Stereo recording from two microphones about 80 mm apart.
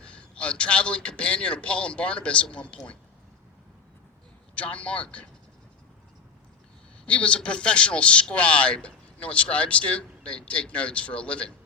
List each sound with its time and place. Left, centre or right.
0.0 s a man's voice: centre
4.5 s a man's voice: centre
7.0 s a man's voice: centre